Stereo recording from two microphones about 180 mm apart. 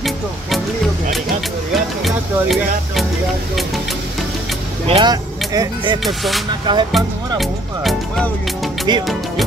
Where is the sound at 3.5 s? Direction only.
Centre (ahead or behind).